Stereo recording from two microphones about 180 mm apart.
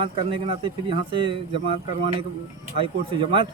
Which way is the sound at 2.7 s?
30° right (ahead or behind).